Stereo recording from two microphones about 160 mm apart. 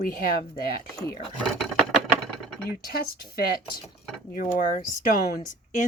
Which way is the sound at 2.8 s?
70° left (ahead or behind).